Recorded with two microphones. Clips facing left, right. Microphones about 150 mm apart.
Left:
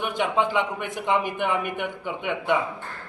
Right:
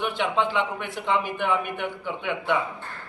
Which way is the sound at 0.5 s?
50° left (ahead or behind).